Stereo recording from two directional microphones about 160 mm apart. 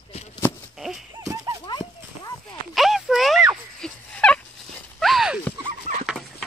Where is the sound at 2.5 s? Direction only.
Centre (ahead or behind).